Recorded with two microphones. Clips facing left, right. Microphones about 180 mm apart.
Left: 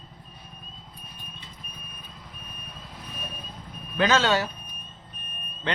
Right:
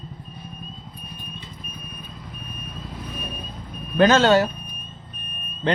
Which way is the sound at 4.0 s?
45° right (ahead or behind).